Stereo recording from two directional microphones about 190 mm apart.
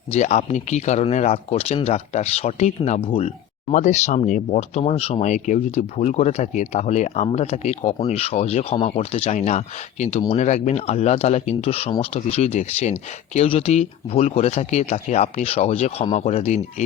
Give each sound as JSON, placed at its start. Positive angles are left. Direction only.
{"t": 0.1, "sound": "speech", "side_deg": 35}